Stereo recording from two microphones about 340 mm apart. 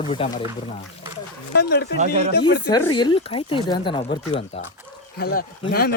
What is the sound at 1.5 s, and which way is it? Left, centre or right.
Speech, left.